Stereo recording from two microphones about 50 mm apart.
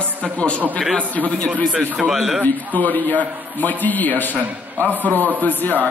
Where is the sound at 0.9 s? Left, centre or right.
Left.